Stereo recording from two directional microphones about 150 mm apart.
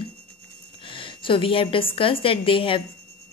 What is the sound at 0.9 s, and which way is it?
A woman's voice, 35° left (ahead or behind).